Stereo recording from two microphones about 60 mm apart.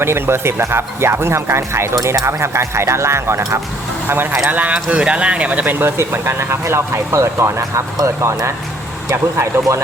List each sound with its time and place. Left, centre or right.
0.0 s speech: right
4.4 s speech: right
5.8 s speech: right
9.0 s speech: right